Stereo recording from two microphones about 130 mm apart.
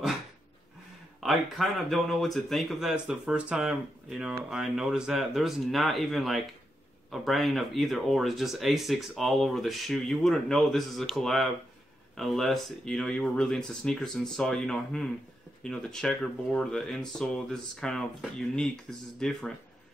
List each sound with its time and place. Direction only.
1.2 s speech: centre (ahead or behind)